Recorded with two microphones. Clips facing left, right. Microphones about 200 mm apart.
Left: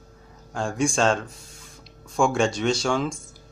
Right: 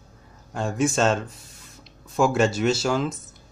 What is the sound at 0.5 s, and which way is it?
Speech, 5° right (ahead or behind).